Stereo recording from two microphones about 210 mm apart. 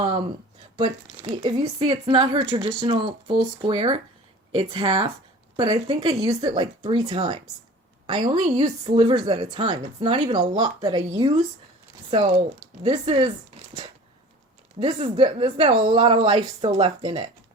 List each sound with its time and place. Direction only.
0.0 s speech: 25° right (ahead or behind)
11.1 s speech: 35° right (ahead or behind)
12.8 s speech: 25° right (ahead or behind)
14.8 s speech: 25° right (ahead or behind)